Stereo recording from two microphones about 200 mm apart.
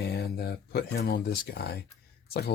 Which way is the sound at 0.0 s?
55° left (ahead or behind).